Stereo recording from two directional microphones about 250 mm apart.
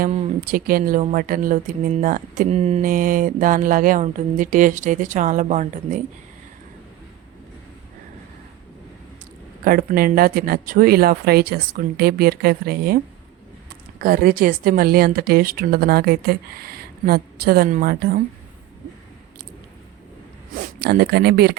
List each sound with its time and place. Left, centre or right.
0.0 s speech: right
9.6 s speech: right
14.0 s speech: right
20.6 s speech: right